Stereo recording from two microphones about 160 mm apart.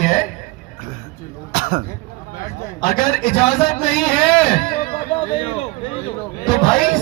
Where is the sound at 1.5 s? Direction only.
55° right (ahead or behind).